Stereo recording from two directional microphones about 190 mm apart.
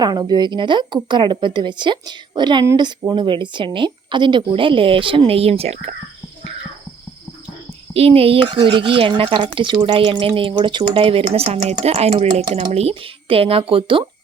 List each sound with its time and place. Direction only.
0.0 s speech: 20° right (ahead or behind)
7.9 s speech: 30° right (ahead or behind)